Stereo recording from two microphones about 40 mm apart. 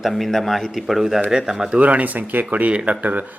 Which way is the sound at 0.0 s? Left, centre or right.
Centre.